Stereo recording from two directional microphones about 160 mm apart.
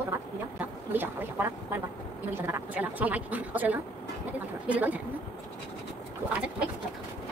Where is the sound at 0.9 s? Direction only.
15° right (ahead or behind).